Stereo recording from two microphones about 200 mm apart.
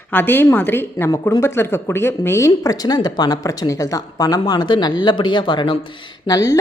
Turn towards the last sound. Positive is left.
turn(degrees=20)  # may be behind; listen again after turning